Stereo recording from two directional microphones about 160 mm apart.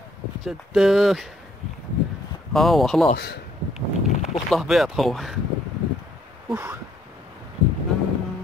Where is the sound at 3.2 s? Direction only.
90° left.